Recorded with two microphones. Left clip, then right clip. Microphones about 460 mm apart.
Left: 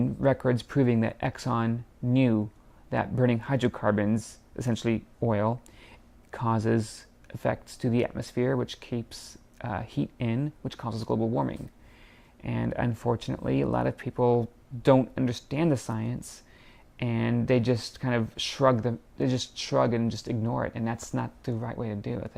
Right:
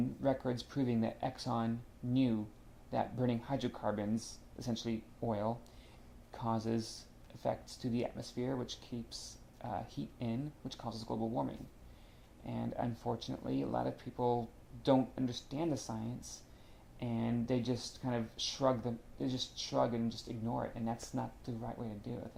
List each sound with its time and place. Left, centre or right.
0.2 s speech: left
4.9 s speech: left
15.4 s speech: left